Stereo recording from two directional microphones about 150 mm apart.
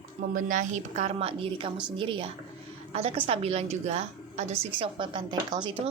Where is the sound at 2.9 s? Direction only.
45° right (ahead or behind).